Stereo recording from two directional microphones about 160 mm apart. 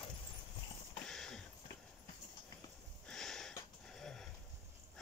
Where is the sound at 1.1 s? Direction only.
5° left (ahead or behind).